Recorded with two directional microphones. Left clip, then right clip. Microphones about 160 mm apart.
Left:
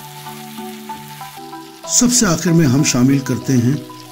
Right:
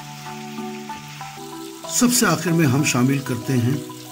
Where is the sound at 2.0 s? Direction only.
40° left (ahead or behind).